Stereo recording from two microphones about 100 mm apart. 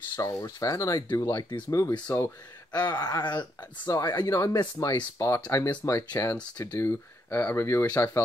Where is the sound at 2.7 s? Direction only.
45° left (ahead or behind).